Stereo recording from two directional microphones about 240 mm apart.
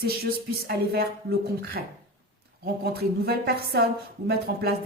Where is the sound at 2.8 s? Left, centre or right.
Right.